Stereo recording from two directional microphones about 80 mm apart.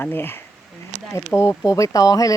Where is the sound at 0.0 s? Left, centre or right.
Left.